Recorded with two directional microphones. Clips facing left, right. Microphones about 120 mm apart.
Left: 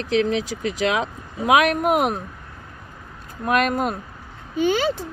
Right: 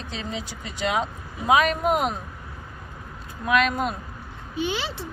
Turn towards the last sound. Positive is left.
turn(degrees=45)  # may be behind; listen again after turning